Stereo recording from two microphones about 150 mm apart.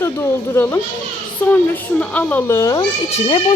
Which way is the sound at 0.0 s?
15° left (ahead or behind).